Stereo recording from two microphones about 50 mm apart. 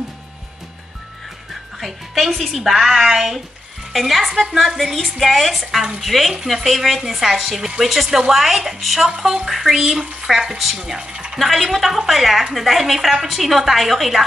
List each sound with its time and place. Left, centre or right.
1.8 s a woman's voice: centre
11.3 s a woman's voice: centre